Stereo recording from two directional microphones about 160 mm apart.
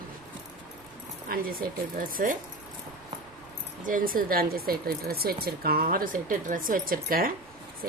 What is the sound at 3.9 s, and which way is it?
Speech, 60° right (ahead or behind).